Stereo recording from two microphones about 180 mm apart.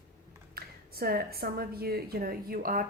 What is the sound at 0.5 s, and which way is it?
A woman's voice, 60° right (ahead or behind).